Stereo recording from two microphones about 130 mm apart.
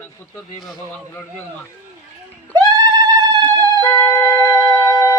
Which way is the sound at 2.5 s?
30° right (ahead or behind).